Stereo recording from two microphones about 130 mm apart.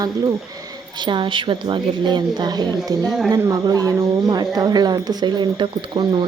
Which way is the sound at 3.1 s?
5° right (ahead or behind).